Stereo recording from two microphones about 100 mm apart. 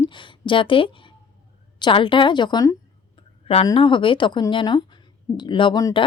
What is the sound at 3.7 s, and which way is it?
Speech, 60° left (ahead or behind).